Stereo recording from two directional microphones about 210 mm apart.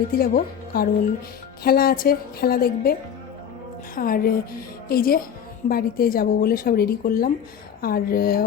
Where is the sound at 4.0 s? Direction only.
45° left (ahead or behind).